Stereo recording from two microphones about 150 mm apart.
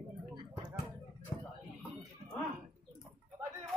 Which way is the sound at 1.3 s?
35° left (ahead or behind).